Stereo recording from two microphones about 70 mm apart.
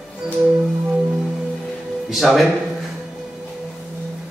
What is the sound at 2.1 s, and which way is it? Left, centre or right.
Speech, centre.